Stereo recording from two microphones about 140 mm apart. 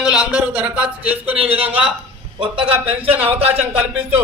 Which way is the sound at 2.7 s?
10° right (ahead or behind).